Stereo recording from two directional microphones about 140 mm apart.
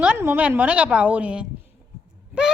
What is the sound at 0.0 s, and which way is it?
A woman's voice, 15° right (ahead or behind).